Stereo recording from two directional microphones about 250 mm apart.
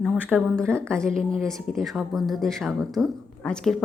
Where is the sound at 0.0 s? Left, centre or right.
Centre.